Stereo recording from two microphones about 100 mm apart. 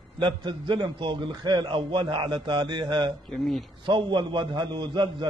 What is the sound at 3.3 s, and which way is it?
Speech, centre (ahead or behind).